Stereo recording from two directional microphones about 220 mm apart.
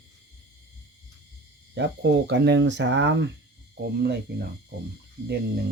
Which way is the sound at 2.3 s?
55° right (ahead or behind).